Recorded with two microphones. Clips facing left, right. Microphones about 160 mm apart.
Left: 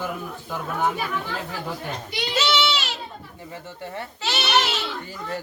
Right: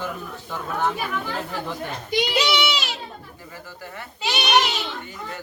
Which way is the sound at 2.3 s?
15° right (ahead or behind).